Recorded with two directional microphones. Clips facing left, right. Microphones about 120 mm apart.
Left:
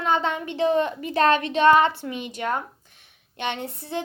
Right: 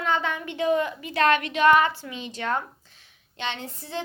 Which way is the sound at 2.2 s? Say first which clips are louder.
Right 1 dB; 15° left (ahead or behind).